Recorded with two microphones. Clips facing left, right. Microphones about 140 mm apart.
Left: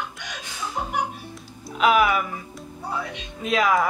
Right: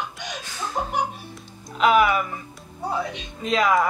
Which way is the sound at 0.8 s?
30° right (ahead or behind).